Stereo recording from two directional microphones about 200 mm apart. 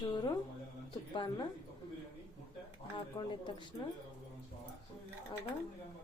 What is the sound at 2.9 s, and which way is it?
Speech, 25° left (ahead or behind).